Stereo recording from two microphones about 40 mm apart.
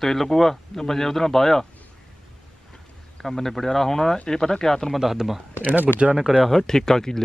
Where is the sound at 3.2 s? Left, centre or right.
Centre.